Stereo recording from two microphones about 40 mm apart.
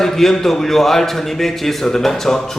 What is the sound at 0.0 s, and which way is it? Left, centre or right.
A man's voice, centre.